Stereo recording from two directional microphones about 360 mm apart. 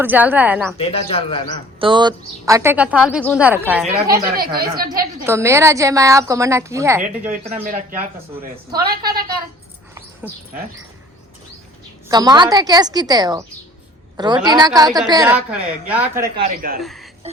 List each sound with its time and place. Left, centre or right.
0.0 s a woman's voice: centre
0.8 s a man's voice: centre
1.8 s a woman's voice: centre
3.9 s speech: right
5.2 s a woman's voice: centre
12.0 s a woman's voice: centre
16.5 s speech: right
16.8 s speech: centre